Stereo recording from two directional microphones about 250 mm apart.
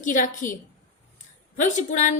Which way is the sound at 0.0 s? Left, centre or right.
Left.